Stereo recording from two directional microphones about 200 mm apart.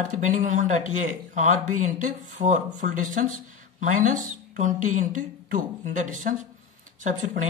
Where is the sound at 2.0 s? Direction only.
40° right (ahead or behind).